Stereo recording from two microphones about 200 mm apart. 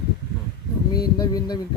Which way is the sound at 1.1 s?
20° left (ahead or behind).